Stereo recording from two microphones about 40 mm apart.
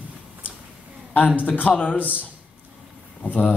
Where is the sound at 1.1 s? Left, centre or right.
Left.